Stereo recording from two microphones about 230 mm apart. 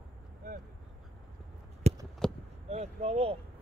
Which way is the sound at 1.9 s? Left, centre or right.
Right.